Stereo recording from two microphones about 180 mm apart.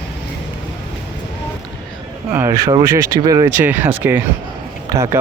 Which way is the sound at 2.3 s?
15° right (ahead or behind).